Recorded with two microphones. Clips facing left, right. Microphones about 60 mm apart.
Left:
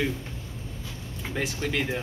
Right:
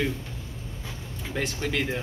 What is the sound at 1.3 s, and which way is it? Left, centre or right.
Speech, centre.